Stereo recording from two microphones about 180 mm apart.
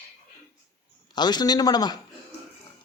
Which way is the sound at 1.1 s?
25° left (ahead or behind).